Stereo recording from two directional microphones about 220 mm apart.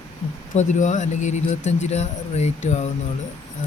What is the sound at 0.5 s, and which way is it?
Speech, 35° left (ahead or behind).